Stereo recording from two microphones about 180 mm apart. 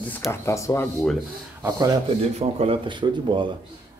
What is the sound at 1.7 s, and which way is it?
Speech, 35° right (ahead or behind).